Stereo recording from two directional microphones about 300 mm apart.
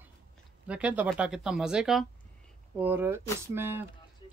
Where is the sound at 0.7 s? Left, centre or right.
Centre.